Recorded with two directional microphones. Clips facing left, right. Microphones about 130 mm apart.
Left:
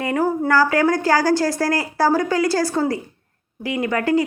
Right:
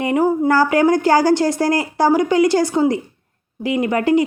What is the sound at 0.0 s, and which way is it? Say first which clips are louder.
A woman's voice: right 4 dB; 20° right (ahead or behind).